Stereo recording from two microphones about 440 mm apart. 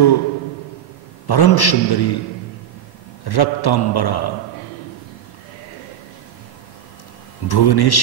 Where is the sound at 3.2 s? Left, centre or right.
Left.